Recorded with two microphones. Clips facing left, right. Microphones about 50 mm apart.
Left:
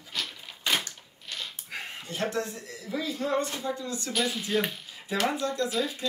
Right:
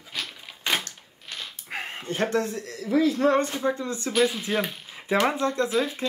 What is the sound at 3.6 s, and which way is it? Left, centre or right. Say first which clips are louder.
Speech: right 6 dB; right.